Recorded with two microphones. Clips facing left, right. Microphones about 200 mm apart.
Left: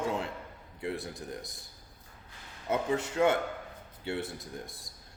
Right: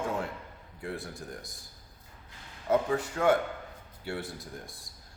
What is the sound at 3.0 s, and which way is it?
A man's voice, 25° left (ahead or behind).